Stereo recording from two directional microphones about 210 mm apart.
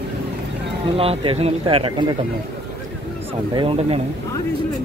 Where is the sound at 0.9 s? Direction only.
25° right (ahead or behind).